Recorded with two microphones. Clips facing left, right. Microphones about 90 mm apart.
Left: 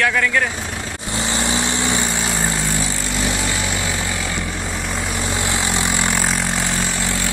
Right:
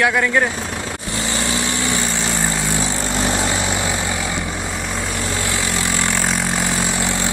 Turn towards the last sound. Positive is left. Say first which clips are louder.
# left 1 dB
turn(degrees=20)  # may be behind; listen again after turning